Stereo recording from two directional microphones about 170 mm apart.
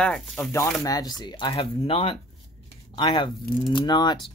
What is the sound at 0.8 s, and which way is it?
Speech, 25° left (ahead or behind).